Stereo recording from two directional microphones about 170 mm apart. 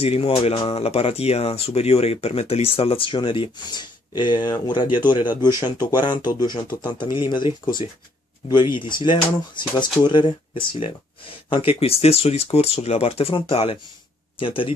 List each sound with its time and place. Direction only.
0.0 s speech: 35° left (ahead or behind)